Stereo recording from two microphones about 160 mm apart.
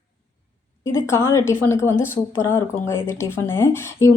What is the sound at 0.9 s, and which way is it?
Speech, 15° left (ahead or behind).